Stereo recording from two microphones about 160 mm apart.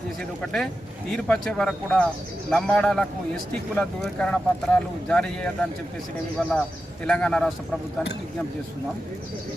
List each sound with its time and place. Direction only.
0.2 s a man's voice: centre (ahead or behind)